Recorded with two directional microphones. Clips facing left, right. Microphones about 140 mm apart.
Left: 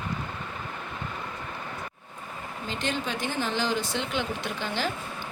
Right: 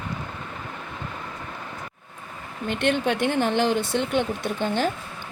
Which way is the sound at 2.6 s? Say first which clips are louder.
Right 8 dB; 60° right (ahead or behind).